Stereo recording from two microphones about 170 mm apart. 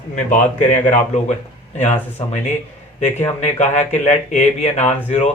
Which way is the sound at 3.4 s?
45° left (ahead or behind).